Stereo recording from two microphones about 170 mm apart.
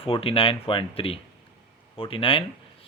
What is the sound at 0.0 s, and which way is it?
A man's voice, 35° left (ahead or behind).